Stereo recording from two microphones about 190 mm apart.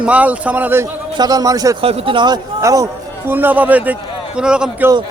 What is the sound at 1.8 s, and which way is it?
A man's voice, 30° right (ahead or behind).